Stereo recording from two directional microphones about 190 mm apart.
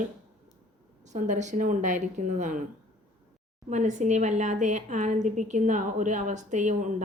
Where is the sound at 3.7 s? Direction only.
40° right (ahead or behind).